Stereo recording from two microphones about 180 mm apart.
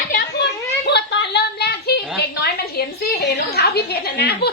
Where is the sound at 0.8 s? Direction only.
70° left (ahead or behind).